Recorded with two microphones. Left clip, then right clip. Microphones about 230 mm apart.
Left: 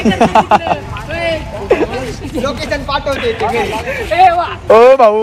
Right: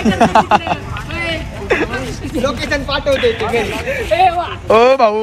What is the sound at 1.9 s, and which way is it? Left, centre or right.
Speech, centre.